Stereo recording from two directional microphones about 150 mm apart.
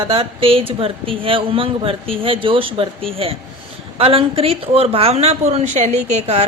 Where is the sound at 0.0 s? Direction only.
35° right (ahead or behind).